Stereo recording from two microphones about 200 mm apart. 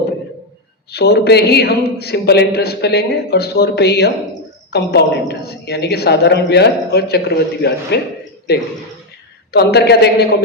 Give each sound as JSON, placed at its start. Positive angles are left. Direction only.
{"t": 0.9, "sound": "a woman's voice", "side_deg": 55}
{"t": 9.5, "sound": "speech", "side_deg": 55}